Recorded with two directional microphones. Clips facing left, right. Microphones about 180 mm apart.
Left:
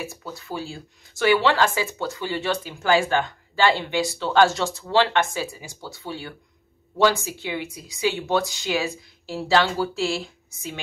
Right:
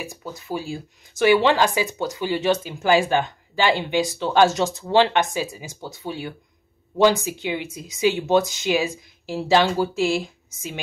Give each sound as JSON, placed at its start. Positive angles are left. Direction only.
{"t": 0.0, "sound": "speech", "side_deg": -15}